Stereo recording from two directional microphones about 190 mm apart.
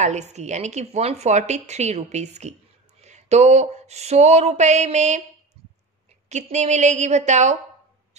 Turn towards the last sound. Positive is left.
turn(degrees=-40)  # may be behind; listen again after turning